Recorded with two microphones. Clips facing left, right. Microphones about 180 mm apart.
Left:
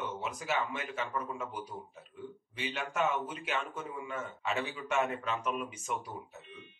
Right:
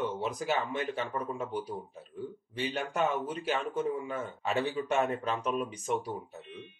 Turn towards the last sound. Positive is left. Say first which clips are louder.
# right 5 dB
turn(degrees=-35)  # may be behind; listen again after turning